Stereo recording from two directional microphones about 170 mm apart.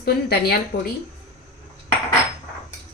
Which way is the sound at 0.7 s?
85° left.